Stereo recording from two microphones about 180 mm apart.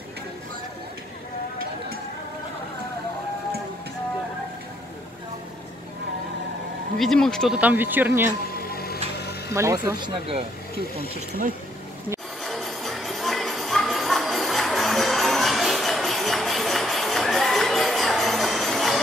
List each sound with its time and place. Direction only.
7.0 s speech: 5° left (ahead or behind)
8.5 s music: 55° left (ahead or behind)
9.5 s speech: 15° right (ahead or behind)
12.4 s music: centre (ahead or behind)